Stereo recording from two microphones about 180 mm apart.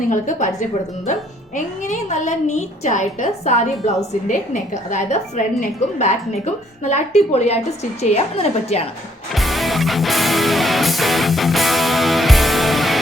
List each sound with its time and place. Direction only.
0.0 s a woman's voice: 45° left (ahead or behind)
1.5 s a woman's voice: 45° left (ahead or behind)
9.3 s music: centre (ahead or behind)